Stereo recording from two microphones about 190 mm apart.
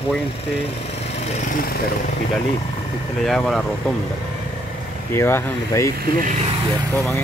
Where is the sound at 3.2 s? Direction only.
Centre (ahead or behind).